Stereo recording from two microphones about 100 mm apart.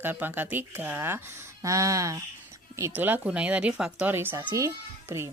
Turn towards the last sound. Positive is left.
turn(degrees=-30)  # may be behind; listen again after turning